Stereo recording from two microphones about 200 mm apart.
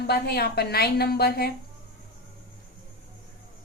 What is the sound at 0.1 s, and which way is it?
A woman's voice, 55° left (ahead or behind).